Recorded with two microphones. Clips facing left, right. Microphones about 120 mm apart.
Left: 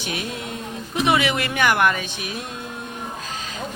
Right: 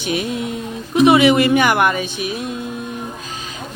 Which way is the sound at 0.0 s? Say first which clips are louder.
Right 8 dB; 15° right (ahead or behind).